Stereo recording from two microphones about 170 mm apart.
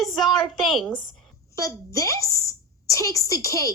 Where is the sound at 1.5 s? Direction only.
20° left (ahead or behind).